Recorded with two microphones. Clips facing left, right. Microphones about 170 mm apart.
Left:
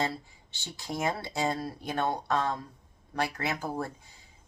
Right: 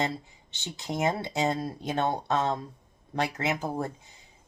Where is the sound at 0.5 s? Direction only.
20° right (ahead or behind).